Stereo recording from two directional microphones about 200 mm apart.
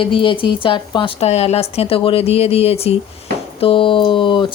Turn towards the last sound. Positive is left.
turn(degrees=25)  # may be behind; listen again after turning